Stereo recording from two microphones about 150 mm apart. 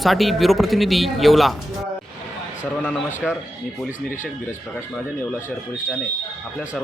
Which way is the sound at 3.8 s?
55° left (ahead or behind).